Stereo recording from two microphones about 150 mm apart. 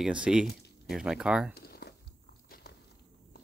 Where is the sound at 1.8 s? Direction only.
90° left.